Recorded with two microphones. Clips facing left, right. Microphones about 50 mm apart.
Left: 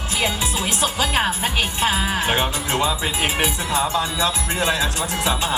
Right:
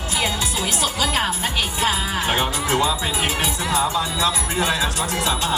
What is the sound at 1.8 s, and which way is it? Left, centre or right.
Music, left.